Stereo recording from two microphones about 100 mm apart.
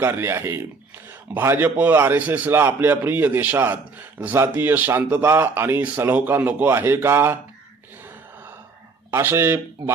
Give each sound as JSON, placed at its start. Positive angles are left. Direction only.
{"t": 0.0, "sound": "speech", "side_deg": -25}
{"t": 9.0, "sound": "speech", "side_deg": -25}